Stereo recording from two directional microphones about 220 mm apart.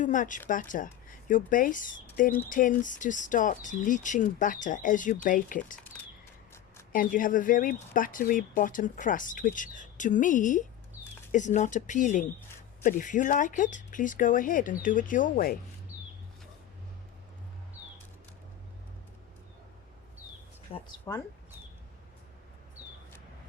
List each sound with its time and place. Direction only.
0.0 s speech: 35° left (ahead or behind)
6.9 s speech: 40° left (ahead or behind)
20.7 s speech: 25° left (ahead or behind)
21.1 s speech: 15° left (ahead or behind)